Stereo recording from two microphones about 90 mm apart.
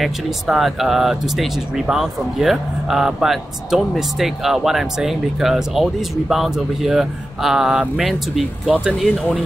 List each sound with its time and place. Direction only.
0.0 s speech: centre (ahead or behind)